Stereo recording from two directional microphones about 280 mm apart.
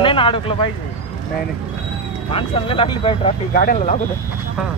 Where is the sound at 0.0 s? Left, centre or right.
Centre.